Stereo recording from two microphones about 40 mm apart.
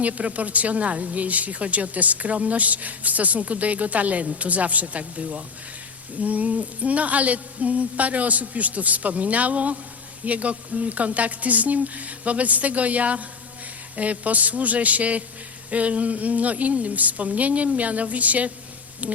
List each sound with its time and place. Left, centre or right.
0.0 s a woman's voice: right